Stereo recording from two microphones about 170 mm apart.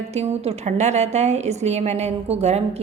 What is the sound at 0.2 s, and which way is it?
A woman's voice, 40° right (ahead or behind).